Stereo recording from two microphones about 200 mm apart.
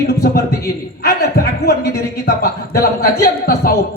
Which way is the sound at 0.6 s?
50° left (ahead or behind).